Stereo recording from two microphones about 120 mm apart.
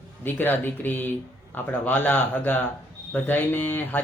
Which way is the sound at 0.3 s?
15° left (ahead or behind).